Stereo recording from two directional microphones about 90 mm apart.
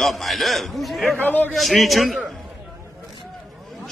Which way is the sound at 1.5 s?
Centre (ahead or behind).